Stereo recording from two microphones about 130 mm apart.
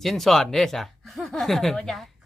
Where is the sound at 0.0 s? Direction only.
Centre (ahead or behind).